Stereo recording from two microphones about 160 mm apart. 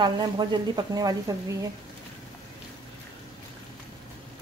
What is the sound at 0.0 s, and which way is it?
A woman's voice, 25° right (ahead or behind).